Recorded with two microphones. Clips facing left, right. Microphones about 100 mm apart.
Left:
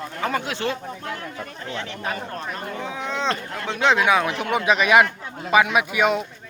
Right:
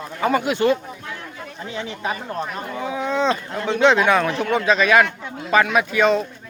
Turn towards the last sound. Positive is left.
turn(degrees=10)  # may be behind; listen again after turning